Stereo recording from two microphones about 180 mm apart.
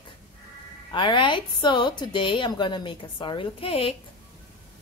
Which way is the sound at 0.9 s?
25° left (ahead or behind).